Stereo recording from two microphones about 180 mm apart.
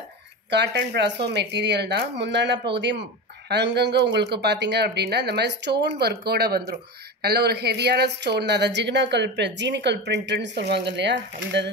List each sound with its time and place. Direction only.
0.5 s speech: 70° right (ahead or behind)